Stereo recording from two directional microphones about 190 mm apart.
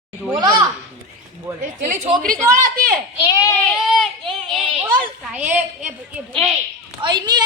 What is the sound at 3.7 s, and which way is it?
Speech, centre (ahead or behind).